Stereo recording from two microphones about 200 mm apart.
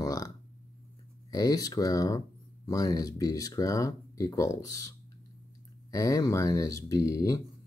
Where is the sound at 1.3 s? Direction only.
20° left (ahead or behind).